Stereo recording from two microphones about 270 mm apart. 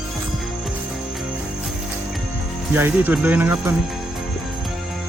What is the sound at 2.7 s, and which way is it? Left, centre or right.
Speech, centre.